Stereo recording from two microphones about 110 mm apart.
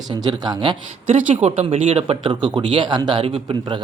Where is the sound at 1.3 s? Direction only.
65° right (ahead or behind).